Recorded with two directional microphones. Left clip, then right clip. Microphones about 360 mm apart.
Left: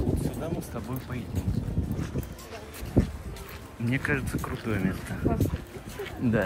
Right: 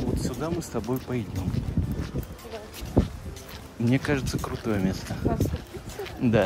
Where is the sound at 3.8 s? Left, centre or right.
Centre.